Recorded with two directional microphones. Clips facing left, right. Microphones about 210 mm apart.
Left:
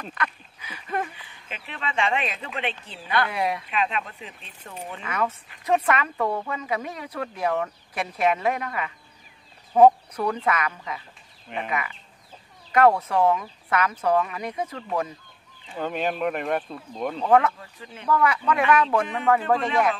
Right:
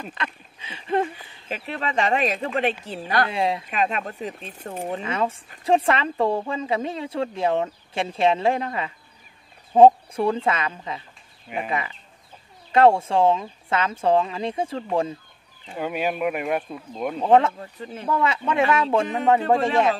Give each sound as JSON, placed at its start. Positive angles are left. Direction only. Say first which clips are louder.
{"t": 0.1, "sound": "a sound", "louder": "left 1 dB", "side_deg": -25}
{"t": 1.1, "sound": "speech", "louder": "right 8 dB", "side_deg": -40}
{"t": 3.3, "sound": "speech", "louder": "right 3 dB", "side_deg": -25}
{"t": 3.6, "sound": "speech", "louder": "right 2 dB", "side_deg": -45}
{"t": 5.0, "sound": "speech", "louder": "left 3 dB", "side_deg": -30}
{"t": 11.4, "sound": "speech", "louder": "right 2 dB", "side_deg": -5}
{"t": 12.7, "sound": "speech", "louder": "right 2 dB", "side_deg": -25}
{"t": 15.7, "sound": "speech", "louder": "right 1 dB", "side_deg": -10}
{"t": 17.2, "sound": "speech", "louder": "right 2 dB", "side_deg": -25}